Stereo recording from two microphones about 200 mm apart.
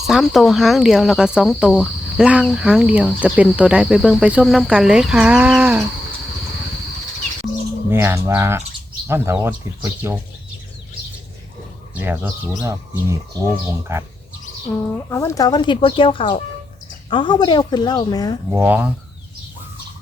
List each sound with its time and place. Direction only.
0.1 s speech: centre (ahead or behind)
7.9 s speech: 10° right (ahead or behind)
11.9 s speech: 10° right (ahead or behind)
15.1 s speech: 15° left (ahead or behind)
18.5 s speech: 10° right (ahead or behind)